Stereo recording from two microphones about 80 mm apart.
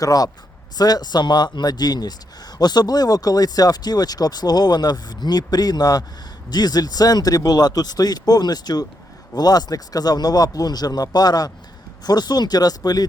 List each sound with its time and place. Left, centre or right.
0.0 s speech: left